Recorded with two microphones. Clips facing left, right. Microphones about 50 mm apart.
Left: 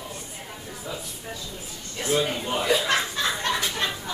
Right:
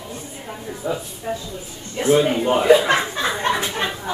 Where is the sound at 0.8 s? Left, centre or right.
Right.